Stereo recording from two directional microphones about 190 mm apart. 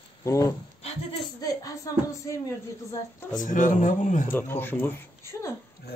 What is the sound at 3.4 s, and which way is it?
Speech, 45° left (ahead or behind).